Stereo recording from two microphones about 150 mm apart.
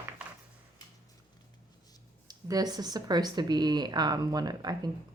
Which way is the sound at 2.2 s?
25° right (ahead or behind).